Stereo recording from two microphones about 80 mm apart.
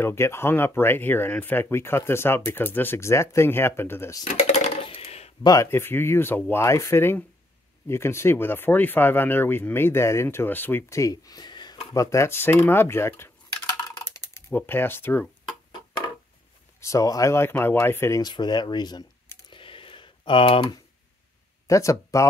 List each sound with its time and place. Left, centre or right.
0.0 s speech: left
5.4 s speech: left
5.7 s speech: left
10.9 s speech: left
11.9 s speech: left
13.9 s typing: left
14.5 s speech: left
16.8 s speech: left
17.3 s speech: left
18.2 s speech: left
19.5 s a sound: left
21.6 s speech: left